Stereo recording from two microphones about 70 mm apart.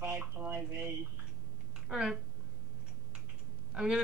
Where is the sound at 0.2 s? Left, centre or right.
Right.